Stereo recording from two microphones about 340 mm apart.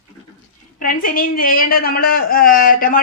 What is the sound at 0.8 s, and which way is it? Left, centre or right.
Speech, left.